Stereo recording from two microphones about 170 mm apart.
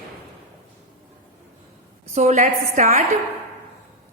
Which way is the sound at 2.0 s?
40° right (ahead or behind).